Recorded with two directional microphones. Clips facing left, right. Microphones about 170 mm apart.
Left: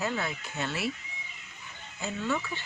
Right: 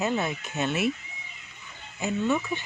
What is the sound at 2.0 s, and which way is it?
Speech, 20° right (ahead or behind).